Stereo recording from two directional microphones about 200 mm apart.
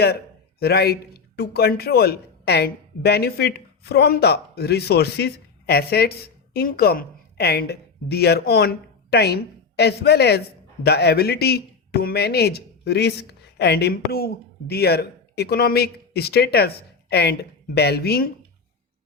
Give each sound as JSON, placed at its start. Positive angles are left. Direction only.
{"t": 0.6, "sound": "speech", "side_deg": 50}